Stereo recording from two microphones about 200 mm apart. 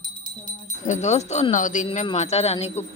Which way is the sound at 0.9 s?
35° left (ahead or behind).